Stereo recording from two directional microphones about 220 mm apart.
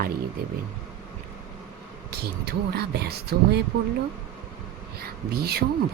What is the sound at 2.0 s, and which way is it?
Speech, 45° right (ahead or behind).